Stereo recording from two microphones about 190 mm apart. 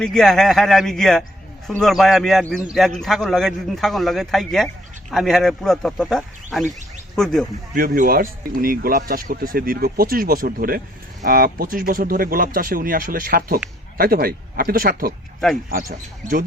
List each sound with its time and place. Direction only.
0.0 s a man's voice: centre (ahead or behind)
7.8 s speech: 50° right (ahead or behind)